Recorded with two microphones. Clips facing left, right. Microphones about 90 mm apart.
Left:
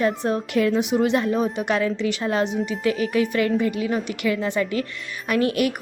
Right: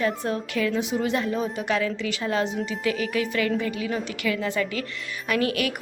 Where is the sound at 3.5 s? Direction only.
10° left (ahead or behind).